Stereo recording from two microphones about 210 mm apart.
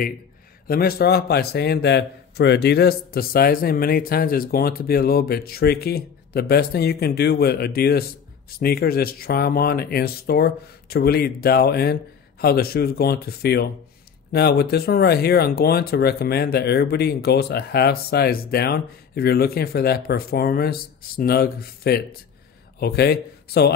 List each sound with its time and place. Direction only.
0.7 s a man's voice: 45° left (ahead or behind)